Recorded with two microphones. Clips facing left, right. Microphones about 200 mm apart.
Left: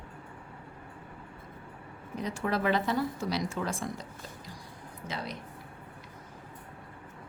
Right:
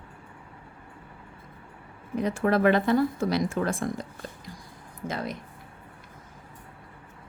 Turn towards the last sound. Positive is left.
turn(degrees=-50)  # may be behind; listen again after turning